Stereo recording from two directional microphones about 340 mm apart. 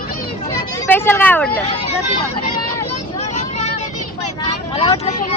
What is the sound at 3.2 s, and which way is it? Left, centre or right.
Vehicle, centre.